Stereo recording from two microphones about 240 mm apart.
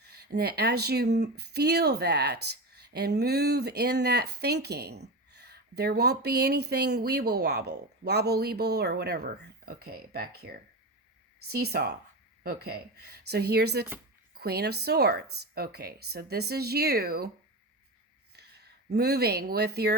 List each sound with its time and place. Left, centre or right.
0.0 s speech: right
18.3 s speech: right